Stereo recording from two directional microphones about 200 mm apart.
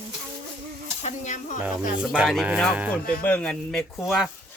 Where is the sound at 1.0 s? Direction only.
35° left (ahead or behind).